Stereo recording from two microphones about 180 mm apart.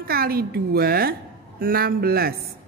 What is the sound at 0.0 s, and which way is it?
Speech, 55° right (ahead or behind).